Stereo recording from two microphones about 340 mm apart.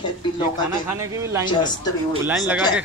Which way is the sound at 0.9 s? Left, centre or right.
Centre.